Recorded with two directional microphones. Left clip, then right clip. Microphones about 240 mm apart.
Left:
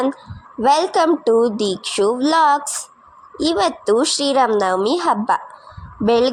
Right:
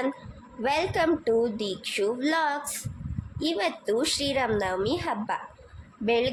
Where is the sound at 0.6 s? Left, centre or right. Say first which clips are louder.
Left 11 dB; left.